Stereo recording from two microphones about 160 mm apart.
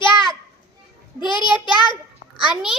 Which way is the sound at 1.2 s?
30° left (ahead or behind).